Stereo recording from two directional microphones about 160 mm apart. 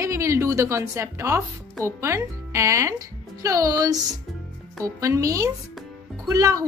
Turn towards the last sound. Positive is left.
turn(degrees=-20)  # may be behind; listen again after turning